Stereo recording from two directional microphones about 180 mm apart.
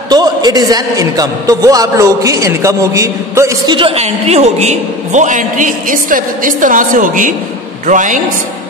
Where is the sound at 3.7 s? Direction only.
35° right (ahead or behind).